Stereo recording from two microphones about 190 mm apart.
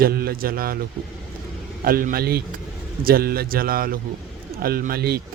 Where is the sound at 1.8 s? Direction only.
50° right (ahead or behind).